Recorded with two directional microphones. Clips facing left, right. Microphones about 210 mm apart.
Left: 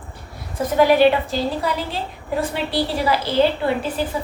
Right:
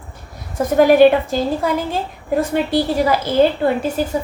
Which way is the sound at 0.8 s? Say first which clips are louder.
Right 4 dB; 50° right (ahead or behind).